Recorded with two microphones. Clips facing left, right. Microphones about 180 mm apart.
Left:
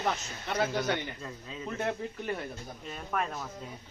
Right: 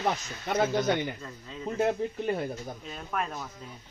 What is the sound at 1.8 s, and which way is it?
Speech, 30° right (ahead or behind).